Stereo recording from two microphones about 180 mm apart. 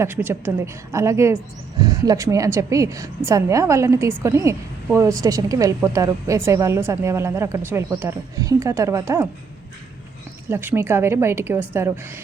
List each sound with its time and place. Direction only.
0.0 s a woman's voice: 10° right (ahead or behind)
10.5 s a woman's voice: 15° right (ahead or behind)